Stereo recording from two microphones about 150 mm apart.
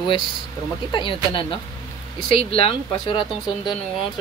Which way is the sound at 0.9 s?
35° left (ahead or behind).